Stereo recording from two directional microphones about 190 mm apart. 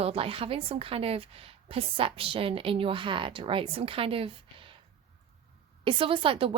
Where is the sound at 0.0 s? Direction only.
30° right (ahead or behind).